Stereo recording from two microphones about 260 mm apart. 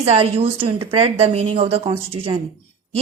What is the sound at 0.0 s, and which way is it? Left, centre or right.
A woman's voice, right.